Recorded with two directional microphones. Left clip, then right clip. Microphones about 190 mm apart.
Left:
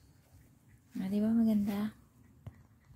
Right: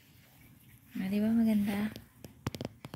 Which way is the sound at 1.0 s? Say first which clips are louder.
Right 1 dB; 15° left (ahead or behind).